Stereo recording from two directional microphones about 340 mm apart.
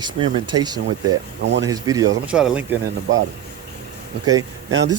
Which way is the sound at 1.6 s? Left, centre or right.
Centre.